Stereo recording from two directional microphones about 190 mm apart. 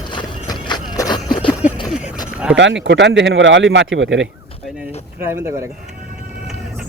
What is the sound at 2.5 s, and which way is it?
Speech, 70° right (ahead or behind).